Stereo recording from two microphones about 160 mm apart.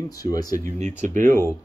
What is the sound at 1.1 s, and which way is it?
Speech, 50° right (ahead or behind).